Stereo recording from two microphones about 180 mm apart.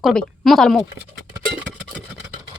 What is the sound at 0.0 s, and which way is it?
Speech, centre (ahead or behind).